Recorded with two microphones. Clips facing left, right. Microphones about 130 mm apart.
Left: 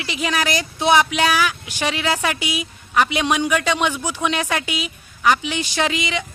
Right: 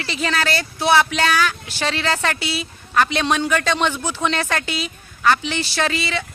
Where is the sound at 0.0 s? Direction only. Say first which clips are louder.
Even; 10° left (ahead or behind).